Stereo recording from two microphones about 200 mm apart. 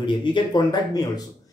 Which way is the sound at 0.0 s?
25° left (ahead or behind).